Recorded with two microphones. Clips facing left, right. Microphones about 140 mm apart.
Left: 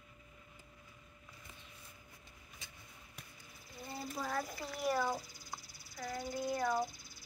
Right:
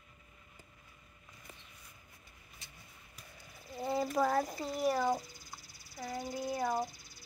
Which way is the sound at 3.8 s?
80° right.